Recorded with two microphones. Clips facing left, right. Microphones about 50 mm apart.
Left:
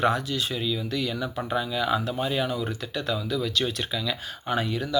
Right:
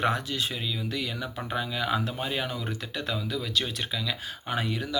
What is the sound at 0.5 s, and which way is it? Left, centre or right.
Speech, centre.